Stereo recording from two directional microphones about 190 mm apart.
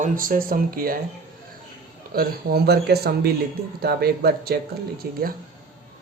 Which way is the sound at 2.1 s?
50° right (ahead or behind).